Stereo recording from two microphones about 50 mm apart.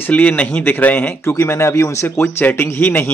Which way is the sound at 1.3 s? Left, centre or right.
Left.